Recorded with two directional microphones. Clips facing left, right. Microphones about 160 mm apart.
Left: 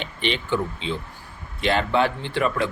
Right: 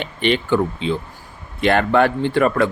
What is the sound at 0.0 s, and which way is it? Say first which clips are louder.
Speech: right 7 dB; 55° right (ahead or behind).